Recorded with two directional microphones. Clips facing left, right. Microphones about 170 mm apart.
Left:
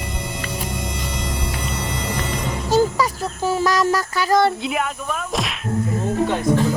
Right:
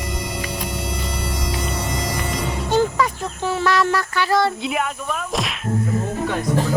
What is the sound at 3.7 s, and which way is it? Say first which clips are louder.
Speech: even; 40° left (ahead or behind).